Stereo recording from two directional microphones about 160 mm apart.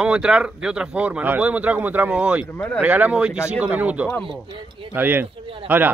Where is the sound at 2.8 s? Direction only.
10° right (ahead or behind).